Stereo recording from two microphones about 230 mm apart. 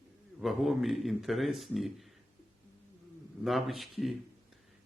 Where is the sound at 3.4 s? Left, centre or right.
Centre.